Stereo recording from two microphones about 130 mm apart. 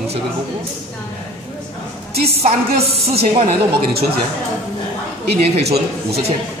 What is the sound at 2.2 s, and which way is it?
A woman's voice, 50° right (ahead or behind).